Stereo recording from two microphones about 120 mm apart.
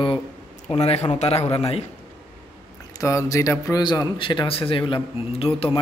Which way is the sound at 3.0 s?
25° left (ahead or behind).